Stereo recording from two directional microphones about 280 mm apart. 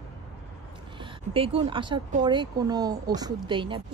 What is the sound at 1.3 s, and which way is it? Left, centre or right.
Speech, centre.